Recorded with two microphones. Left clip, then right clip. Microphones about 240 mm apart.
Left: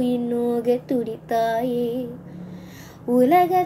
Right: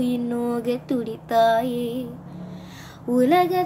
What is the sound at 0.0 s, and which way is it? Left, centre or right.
Female singing, centre.